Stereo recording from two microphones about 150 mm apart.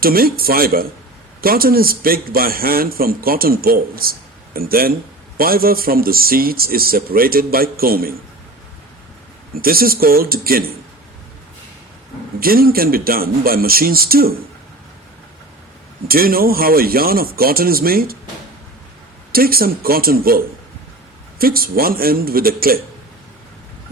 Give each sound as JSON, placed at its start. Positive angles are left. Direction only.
{"t": 0.0, "sound": "a man's voice", "side_deg": -80}
{"t": 9.6, "sound": "a man's voice", "side_deg": -80}
{"t": 12.4, "sound": "a man's voice", "side_deg": -80}
{"t": 16.0, "sound": "a man's voice", "side_deg": -80}
{"t": 19.3, "sound": "a man's voice", "side_deg": -80}